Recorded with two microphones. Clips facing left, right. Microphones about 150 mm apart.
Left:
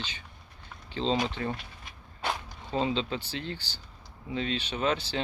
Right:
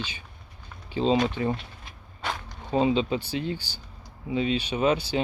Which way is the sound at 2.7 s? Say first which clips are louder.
Right 6 dB; 15° right (ahead or behind).